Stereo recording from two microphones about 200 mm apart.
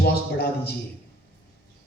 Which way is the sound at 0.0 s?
50° left (ahead or behind).